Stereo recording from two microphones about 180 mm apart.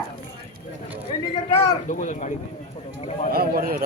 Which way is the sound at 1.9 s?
45° left (ahead or behind).